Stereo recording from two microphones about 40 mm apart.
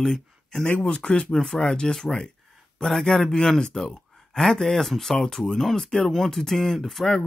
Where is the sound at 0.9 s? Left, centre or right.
Left.